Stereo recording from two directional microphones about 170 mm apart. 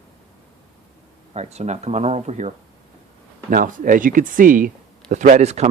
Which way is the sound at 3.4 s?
55° right (ahead or behind).